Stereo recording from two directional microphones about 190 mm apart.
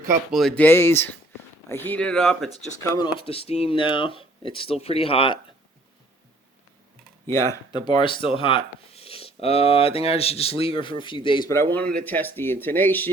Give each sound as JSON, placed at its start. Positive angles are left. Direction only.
{"t": 0.3, "sound": "speech", "side_deg": 0}
{"t": 2.9, "sound": "speech", "side_deg": 25}
{"t": 7.3, "sound": "speech", "side_deg": 15}
{"t": 11.5, "sound": "speech", "side_deg": 10}